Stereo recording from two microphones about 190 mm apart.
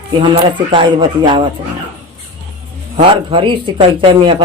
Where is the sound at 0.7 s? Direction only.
25° right (ahead or behind).